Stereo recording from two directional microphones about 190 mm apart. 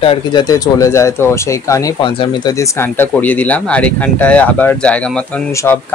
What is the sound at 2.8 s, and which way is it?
Speech, 10° left (ahead or behind).